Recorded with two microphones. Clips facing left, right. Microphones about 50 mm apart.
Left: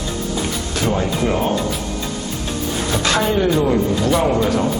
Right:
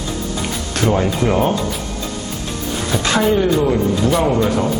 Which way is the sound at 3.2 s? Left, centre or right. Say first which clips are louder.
Right 3 dB; centre.